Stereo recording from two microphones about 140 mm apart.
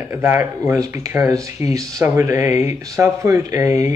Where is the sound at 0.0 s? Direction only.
15° right (ahead or behind).